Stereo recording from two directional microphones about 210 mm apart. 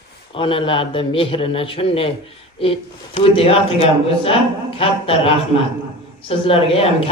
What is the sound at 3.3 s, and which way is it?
A man's voice, 25° left (ahead or behind).